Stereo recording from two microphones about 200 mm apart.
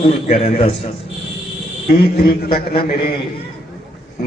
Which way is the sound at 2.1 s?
50° left (ahead or behind).